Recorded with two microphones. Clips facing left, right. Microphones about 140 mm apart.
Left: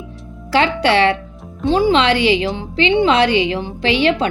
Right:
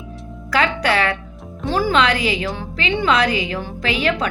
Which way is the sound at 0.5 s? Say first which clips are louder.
Left 4 dB; 30° left (ahead or behind).